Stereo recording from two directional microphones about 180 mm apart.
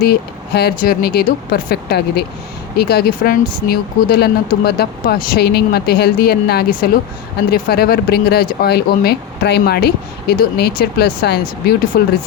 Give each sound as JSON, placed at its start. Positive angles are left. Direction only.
{"t": 0.0, "sound": "speech", "side_deg": 60}